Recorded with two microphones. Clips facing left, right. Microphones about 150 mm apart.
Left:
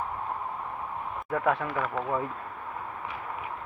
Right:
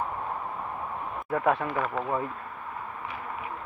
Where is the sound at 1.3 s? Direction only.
15° right (ahead or behind).